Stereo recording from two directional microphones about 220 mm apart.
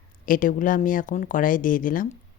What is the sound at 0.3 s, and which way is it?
Speech, 40° left (ahead or behind).